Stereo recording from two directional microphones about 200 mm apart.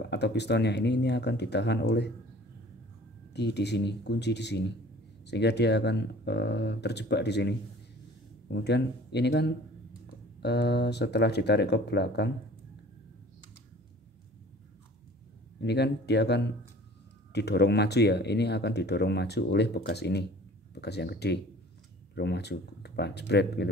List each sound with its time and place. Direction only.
0.0 s speech: 55° left (ahead or behind)
3.3 s speech: 55° left (ahead or behind)
15.6 s speech: 55° left (ahead or behind)